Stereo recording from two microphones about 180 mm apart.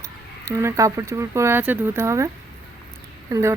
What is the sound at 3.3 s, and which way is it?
Speech, 15° right (ahead or behind).